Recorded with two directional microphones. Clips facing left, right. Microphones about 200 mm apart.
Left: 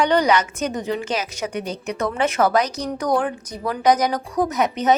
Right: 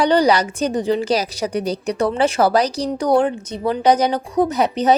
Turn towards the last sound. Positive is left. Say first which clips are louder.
# right 3 dB
turn(degrees=-30)  # may be behind; listen again after turning